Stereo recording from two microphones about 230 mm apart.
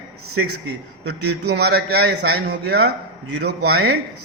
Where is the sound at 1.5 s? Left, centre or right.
Right.